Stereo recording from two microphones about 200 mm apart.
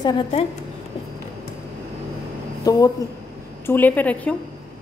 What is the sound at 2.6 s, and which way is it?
A woman's voice, 20° left (ahead or behind).